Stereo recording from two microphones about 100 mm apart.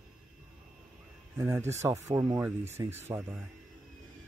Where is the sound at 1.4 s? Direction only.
25° right (ahead or behind).